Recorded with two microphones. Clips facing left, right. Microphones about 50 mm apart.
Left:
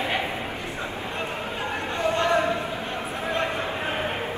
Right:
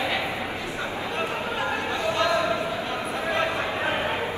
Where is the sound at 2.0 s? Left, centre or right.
Left.